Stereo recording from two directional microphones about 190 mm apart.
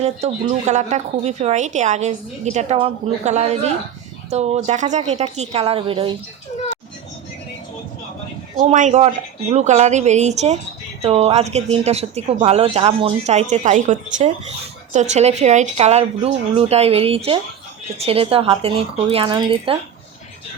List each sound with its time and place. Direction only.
0.0 s a woman's voice: 35° right (ahead or behind)
8.5 s a woman's voice: 40° right (ahead or behind)